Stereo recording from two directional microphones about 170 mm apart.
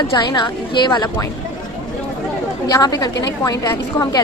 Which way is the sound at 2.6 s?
20° left (ahead or behind).